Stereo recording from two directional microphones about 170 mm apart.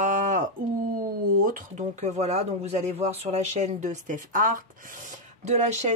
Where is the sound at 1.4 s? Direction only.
50° right (ahead or behind).